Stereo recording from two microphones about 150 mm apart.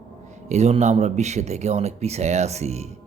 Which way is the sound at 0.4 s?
50° right (ahead or behind).